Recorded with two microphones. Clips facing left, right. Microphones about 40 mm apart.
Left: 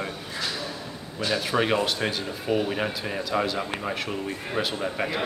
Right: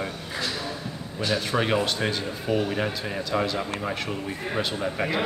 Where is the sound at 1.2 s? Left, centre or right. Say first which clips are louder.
Left 1 dB; centre.